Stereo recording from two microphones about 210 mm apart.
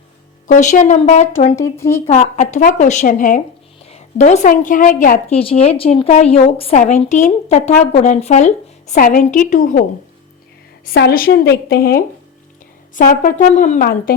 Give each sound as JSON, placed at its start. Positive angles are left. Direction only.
{"t": 0.4, "sound": "a woman's voice", "side_deg": 35}
{"t": 1.7, "sound": "a woman's voice", "side_deg": 10}
{"t": 2.0, "sound": "a woman's voice", "side_deg": 35}
{"t": 10.8, "sound": "a woman's voice", "side_deg": 45}